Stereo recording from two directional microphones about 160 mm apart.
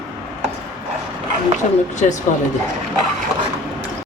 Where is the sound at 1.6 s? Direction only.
50° left (ahead or behind).